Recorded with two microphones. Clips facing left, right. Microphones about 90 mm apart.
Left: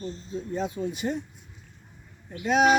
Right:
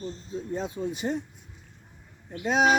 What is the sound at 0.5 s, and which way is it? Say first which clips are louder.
Speech: left 1 dB; 30° right (ahead or behind).